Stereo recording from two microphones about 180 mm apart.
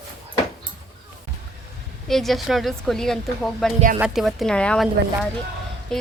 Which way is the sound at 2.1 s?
Centre (ahead or behind).